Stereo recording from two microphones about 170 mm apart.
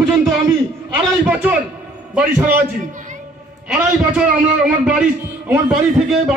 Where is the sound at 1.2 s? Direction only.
10° right (ahead or behind).